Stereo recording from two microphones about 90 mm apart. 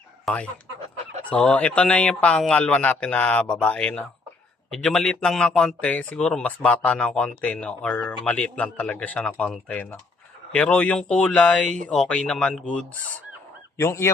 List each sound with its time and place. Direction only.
0.3 s a man's voice: centre (ahead or behind)
1.3 s a man's voice: 15° left (ahead or behind)
13.7 s speech: 30° left (ahead or behind)